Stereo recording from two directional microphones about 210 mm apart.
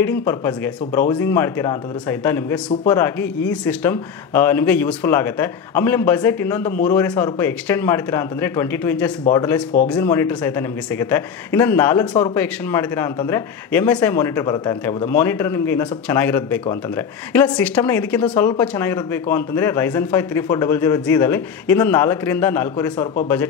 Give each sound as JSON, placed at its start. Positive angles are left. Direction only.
{"t": 0.0, "sound": "speech", "side_deg": 10}